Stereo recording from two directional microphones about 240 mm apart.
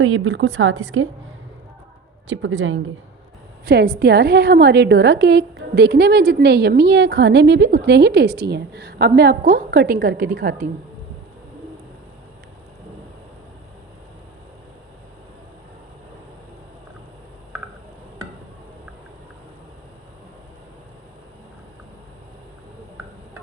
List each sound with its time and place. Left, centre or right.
0.0 s a woman's voice: right
2.3 s a woman's voice: right
3.7 s a woman's voice: right